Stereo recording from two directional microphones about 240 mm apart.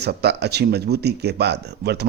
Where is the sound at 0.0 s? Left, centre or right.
Right.